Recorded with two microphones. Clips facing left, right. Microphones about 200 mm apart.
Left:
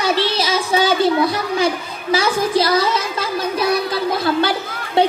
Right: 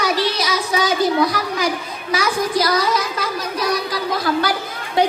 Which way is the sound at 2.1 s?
25° left (ahead or behind).